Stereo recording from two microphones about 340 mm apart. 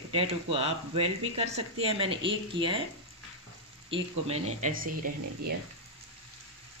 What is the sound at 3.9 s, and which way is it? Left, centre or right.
Speech, centre.